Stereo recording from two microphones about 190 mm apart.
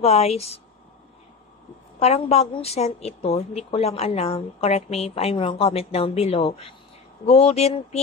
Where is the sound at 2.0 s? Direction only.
35° left (ahead or behind).